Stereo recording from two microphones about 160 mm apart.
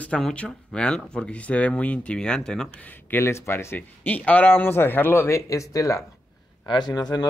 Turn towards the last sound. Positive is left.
turn(degrees=25)  # may be behind; listen again after turning